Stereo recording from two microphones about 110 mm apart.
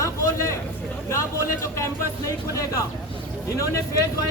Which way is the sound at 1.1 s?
25° left (ahead or behind).